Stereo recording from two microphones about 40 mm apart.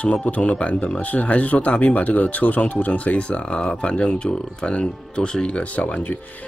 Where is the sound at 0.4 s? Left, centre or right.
Left.